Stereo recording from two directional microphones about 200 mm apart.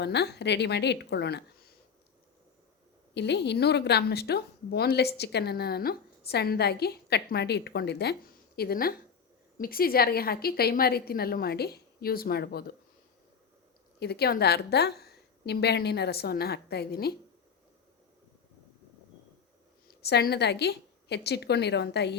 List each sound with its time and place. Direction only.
0.0 s a woman's voice: 55° left (ahead or behind)
3.2 s a woman's voice: 60° left (ahead or behind)
14.0 s a woman's voice: 55° left (ahead or behind)
19.9 s a woman's voice: 55° left (ahead or behind)